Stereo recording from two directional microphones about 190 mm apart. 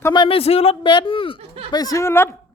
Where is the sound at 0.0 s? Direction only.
25° left (ahead or behind).